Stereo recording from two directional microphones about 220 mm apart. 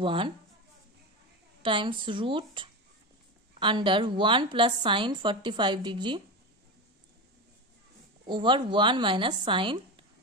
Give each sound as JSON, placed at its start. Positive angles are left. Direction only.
{"t": 0.0, "sound": "a woman's voice", "side_deg": -25}
{"t": 1.6, "sound": "a woman's voice", "side_deg": -20}
{"t": 8.3, "sound": "a woman's voice", "side_deg": -20}